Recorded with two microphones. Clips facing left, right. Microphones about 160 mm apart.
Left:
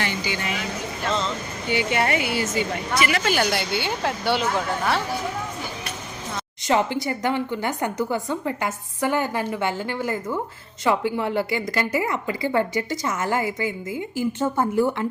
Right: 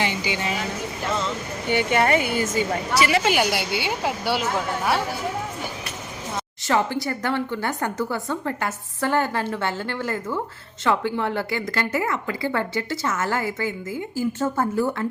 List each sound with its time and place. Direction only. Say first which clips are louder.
0.0 s a woman's voice: right 2 dB; 20° right (ahead or behind)
1.7 s speech: right 3 dB; 50° right (ahead or behind)
3.0 s a woman's voice: right 2 dB; 25° right (ahead or behind)
3.3 s a woman's voice: even; 10° right (ahead or behind)
6.7 s speech: left 1 dB; 20° left (ahead or behind)